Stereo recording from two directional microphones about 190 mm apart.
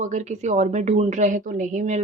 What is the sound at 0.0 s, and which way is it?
A woman's voice, 40° right (ahead or behind).